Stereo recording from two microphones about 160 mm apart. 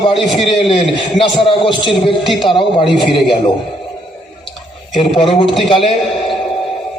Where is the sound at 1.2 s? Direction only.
35° left (ahead or behind).